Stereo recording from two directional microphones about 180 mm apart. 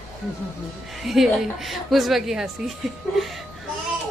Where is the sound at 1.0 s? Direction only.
Centre (ahead or behind).